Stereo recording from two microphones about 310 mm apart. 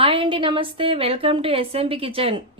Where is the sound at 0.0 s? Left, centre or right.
Centre.